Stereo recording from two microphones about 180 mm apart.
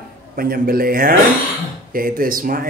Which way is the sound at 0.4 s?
55° right (ahead or behind).